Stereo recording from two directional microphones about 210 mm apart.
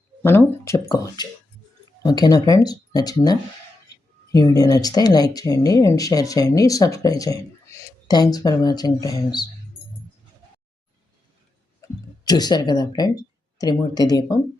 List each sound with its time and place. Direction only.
0.2 s speech: 10° left (ahead or behind)
11.8 s a sound: 20° left (ahead or behind)
13.6 s speech: 20° left (ahead or behind)